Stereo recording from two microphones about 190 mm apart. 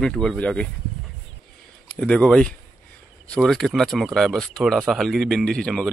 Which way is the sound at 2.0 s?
5° left (ahead or behind).